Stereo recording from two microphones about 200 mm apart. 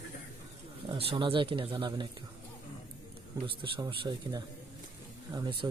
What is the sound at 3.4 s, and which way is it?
Speech, 25° right (ahead or behind).